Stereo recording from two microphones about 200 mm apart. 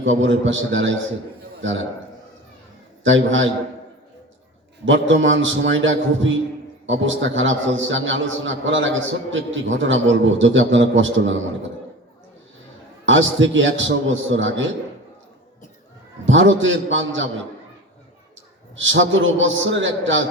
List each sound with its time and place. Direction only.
0.0 s a man's voice: 70° right (ahead or behind)
3.0 s a man's voice: 70° right (ahead or behind)
4.9 s a man's voice: 70° right (ahead or behind)
13.1 s a man's voice: 70° right (ahead or behind)
16.2 s a man's voice: 70° right (ahead or behind)
18.8 s a man's voice: 70° right (ahead or behind)